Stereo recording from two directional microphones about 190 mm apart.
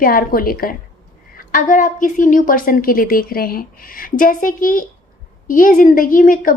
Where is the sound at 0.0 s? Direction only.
50° left (ahead or behind).